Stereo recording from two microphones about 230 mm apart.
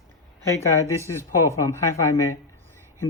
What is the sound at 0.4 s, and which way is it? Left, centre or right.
Speech, centre.